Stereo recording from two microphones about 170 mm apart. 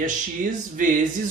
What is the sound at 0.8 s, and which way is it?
Speech, 50° right (ahead or behind).